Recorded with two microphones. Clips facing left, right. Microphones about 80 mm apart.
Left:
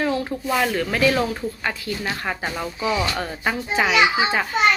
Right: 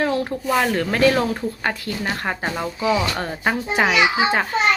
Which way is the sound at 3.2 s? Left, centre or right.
Right.